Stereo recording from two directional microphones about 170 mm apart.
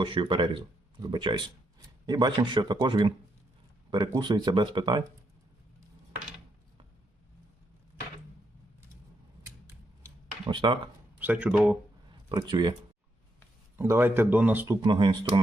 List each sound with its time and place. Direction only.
0.0 s speech: 30° right (ahead or behind)
10.5 s speech: 25° right (ahead or behind)
11.2 s speech: 10° right (ahead or behind)
12.3 s speech: 25° right (ahead or behind)
13.7 s speech: 15° right (ahead or behind)
14.8 s speech: 30° right (ahead or behind)